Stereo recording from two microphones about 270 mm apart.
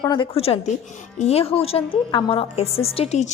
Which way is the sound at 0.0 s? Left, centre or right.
Centre.